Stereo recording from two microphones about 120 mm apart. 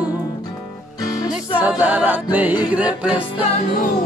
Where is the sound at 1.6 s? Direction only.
15° right (ahead or behind).